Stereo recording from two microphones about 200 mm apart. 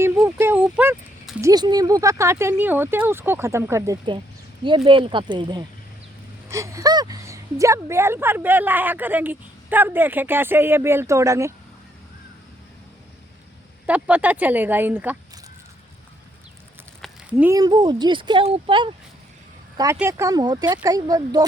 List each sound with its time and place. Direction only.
0.3 s a woman's voice: 10° right (ahead or behind)
13.8 s a woman's voice: 5° right (ahead or behind)
17.0 s speech: 5° right (ahead or behind)